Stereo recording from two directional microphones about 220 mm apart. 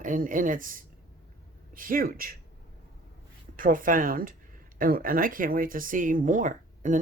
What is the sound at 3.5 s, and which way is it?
Speech, 40° right (ahead or behind).